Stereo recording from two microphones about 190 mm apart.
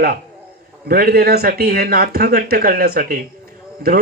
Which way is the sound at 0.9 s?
50° right (ahead or behind).